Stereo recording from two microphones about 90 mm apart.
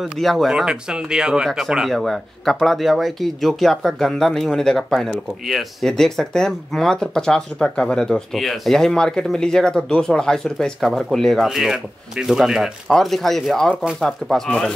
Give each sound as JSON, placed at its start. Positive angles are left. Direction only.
{"t": 0.0, "sound": "speech", "side_deg": 0}